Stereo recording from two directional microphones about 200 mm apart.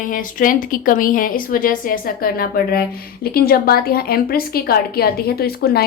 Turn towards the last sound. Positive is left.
turn(degrees=50)  # may be behind; listen again after turning